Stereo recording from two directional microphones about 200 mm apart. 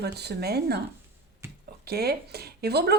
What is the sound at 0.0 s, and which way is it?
Speech, 55° right (ahead or behind).